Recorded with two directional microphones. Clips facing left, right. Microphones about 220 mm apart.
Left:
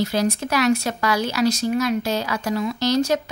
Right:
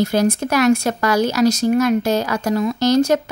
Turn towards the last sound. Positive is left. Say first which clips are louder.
# right 5 dB
turn(degrees=-50)  # may be behind; listen again after turning